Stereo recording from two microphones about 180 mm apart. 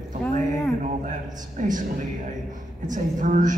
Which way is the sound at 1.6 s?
45° right (ahead or behind).